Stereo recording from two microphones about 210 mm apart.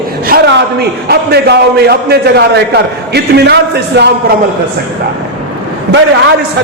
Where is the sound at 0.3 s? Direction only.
50° right (ahead or behind).